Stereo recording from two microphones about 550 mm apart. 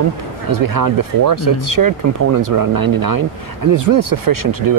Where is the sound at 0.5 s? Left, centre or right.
Right.